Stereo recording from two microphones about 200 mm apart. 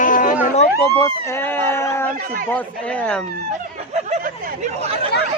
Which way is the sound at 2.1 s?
45° right (ahead or behind).